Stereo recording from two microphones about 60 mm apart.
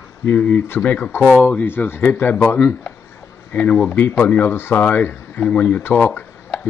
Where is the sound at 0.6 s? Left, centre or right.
Left.